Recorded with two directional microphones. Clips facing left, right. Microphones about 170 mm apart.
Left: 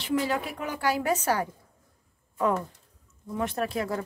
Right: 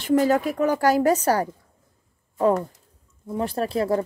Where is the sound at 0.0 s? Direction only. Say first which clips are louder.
Right 8 dB; 45° right (ahead or behind).